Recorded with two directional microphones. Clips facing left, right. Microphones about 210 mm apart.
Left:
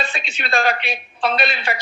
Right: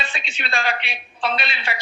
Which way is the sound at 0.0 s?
45° left (ahead or behind).